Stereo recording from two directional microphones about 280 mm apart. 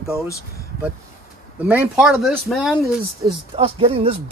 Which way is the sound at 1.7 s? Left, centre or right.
Centre.